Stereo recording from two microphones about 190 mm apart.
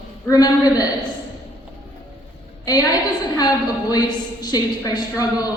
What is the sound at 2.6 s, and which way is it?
A woman's voice, 20° left (ahead or behind).